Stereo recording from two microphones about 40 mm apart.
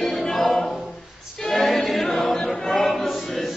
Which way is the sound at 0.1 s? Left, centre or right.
Centre.